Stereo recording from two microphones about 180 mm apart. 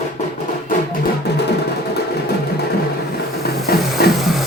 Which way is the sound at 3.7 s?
60° left (ahead or behind).